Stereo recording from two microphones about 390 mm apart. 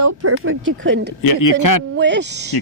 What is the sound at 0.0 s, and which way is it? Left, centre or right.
Speech, right.